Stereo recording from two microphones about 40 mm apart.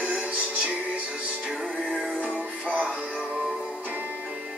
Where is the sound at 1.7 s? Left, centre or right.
Left.